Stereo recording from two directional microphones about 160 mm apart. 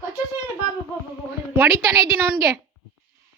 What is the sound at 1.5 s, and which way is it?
Speech, 15° right (ahead or behind).